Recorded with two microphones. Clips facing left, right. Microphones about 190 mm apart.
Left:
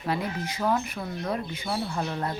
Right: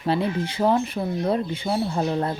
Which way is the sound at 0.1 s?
30° right (ahead or behind).